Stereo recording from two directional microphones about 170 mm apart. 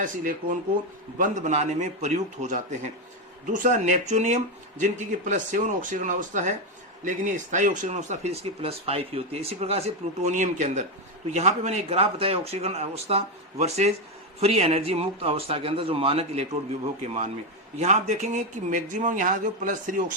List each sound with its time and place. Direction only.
0.0 s speech: 50° right (ahead or behind)
17.7 s speech: 40° right (ahead or behind)